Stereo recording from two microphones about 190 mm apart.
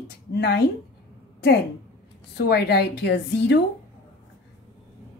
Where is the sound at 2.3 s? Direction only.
60° left (ahead or behind).